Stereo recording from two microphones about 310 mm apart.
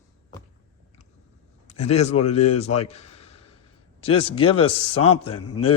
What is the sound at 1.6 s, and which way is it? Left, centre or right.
A man's voice, left.